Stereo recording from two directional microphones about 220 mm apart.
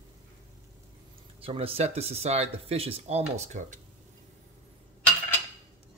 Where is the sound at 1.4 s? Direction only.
25° right (ahead or behind).